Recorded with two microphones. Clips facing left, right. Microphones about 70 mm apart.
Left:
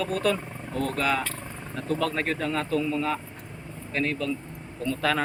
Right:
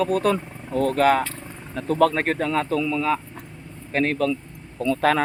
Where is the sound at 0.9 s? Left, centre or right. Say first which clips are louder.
Right 9 dB; right.